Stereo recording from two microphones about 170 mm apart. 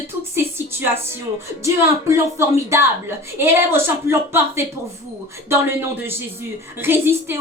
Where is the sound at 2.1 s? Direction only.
15° right (ahead or behind).